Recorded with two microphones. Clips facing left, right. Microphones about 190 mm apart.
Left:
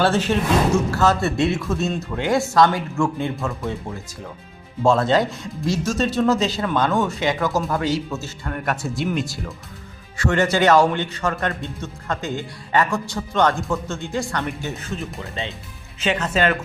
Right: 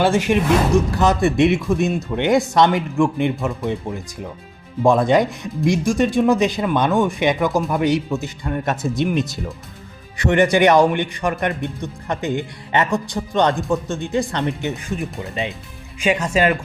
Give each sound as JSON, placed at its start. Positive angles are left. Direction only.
{"t": 0.0, "sound": "a man's voice", "side_deg": -15}